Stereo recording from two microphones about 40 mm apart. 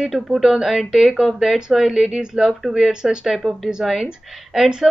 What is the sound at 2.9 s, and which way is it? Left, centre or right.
Speech, centre.